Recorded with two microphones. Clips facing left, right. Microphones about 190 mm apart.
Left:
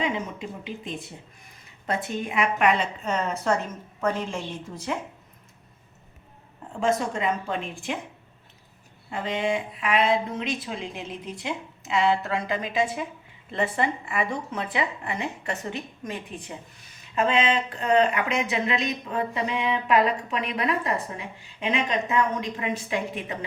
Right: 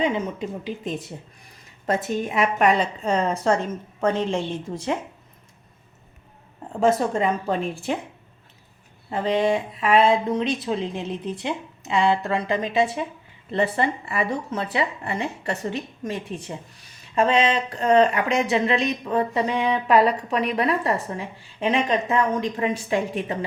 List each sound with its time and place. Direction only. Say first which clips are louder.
0.0 s a woman's voice: right 5 dB; 35° right (ahead or behind)
6.7 s a woman's voice: right 5 dB; 40° right (ahead or behind)
9.0 s a woman's voice: right 6 dB; 35° right (ahead or behind)